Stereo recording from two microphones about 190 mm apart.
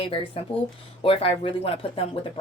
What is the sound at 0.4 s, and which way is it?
A woman's voice, 30° left (ahead or behind).